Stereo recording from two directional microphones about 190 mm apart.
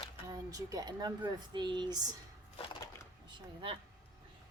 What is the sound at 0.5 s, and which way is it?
A woman's voice, 20° right (ahead or behind).